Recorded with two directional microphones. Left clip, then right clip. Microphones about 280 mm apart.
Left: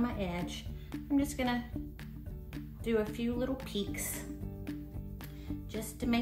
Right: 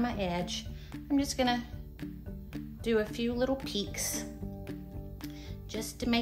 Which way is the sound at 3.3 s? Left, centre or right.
Right.